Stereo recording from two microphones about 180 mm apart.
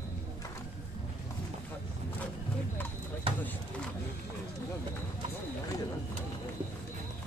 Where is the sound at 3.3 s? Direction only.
30° right (ahead or behind).